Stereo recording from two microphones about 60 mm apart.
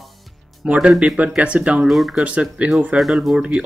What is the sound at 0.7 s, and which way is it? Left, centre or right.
Speech, centre.